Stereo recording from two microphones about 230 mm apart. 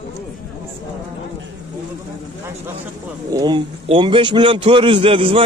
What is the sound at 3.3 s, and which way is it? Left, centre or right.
A man's voice, centre.